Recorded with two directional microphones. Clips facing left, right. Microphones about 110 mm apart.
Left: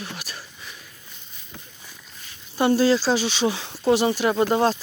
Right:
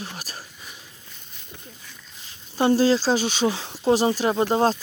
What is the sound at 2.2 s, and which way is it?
Speech, 30° right (ahead or behind).